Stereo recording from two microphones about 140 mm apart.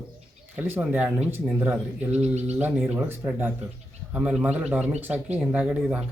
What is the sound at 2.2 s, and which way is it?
Speech, 50° right (ahead or behind).